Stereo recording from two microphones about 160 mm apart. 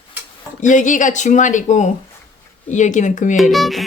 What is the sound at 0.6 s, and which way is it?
Speech, 50° left (ahead or behind).